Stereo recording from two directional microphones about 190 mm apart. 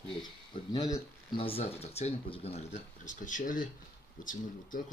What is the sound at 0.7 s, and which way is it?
Speech, 20° left (ahead or behind).